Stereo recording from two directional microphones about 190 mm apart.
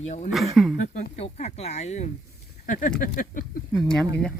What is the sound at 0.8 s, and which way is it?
Speech, 40° left (ahead or behind).